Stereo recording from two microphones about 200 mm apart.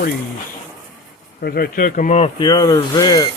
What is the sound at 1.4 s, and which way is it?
Speech, 50° left (ahead or behind).